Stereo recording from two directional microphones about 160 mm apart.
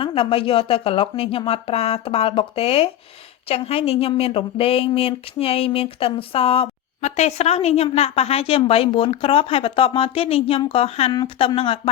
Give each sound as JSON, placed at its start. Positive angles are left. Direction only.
{"t": 0.0, "sound": "speech", "side_deg": 35}